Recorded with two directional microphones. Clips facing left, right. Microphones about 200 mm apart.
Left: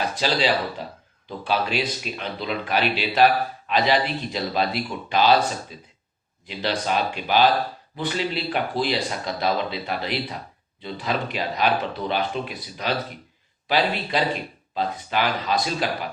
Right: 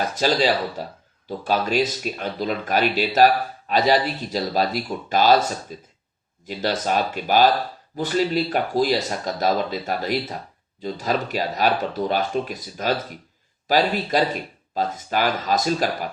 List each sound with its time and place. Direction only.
0.2 s speech: 45° right (ahead or behind)